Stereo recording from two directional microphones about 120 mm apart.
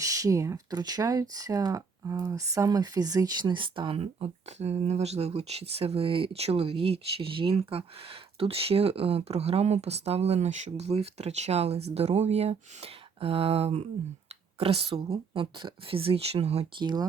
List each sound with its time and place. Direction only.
0.0 s speech: 25° right (ahead or behind); by 16.8 s 55° right (ahead or behind)
16.8 s speech: 35° right (ahead or behind)